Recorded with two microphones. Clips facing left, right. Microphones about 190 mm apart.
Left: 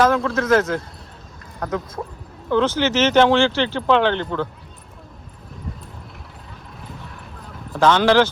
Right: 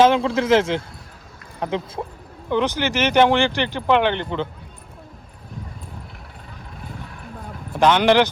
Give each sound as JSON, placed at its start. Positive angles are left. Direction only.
{"t": 0.0, "sound": "speech", "side_deg": -25}
{"t": 7.7, "sound": "speech", "side_deg": -15}